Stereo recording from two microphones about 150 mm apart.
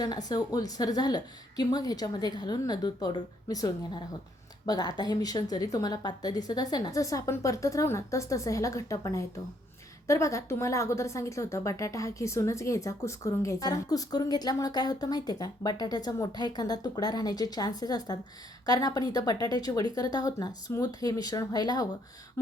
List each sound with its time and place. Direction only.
0.0 s a woman's voice: 25° left (ahead or behind)